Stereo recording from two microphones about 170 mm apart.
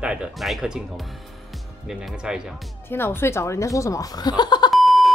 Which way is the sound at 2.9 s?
15° left (ahead or behind).